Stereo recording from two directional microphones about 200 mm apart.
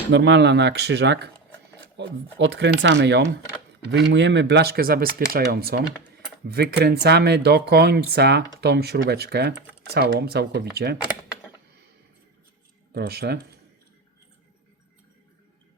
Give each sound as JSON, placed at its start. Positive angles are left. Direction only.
{"t": 0.1, "sound": "speech", "side_deg": -60}
{"t": 12.9, "sound": "speech", "side_deg": -50}